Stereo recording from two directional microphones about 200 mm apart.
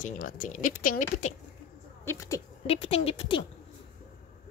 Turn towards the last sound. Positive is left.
turn(degrees=30)  # may be behind; listen again after turning